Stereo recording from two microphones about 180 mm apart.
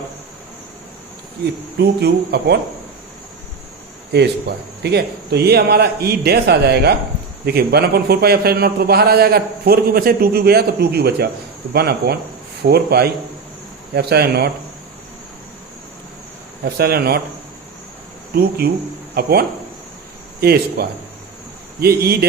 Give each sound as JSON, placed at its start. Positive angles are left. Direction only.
{"t": 1.8, "sound": "a man's voice", "side_deg": -65}
{"t": 4.1, "sound": "a man's voice", "side_deg": -65}
{"t": 16.6, "sound": "a man's voice", "side_deg": -60}
{"t": 18.3, "sound": "a man's voice", "side_deg": -55}